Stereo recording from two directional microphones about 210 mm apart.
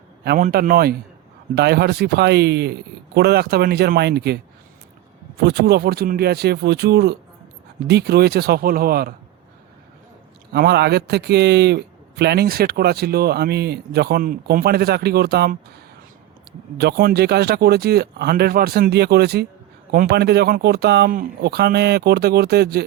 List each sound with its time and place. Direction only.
0.3 s a man's voice: 40° right (ahead or behind)
5.4 s a man's voice: 50° right (ahead or behind)
10.5 s a man's voice: 50° right (ahead or behind)
16.7 s a man's voice: 50° right (ahead or behind)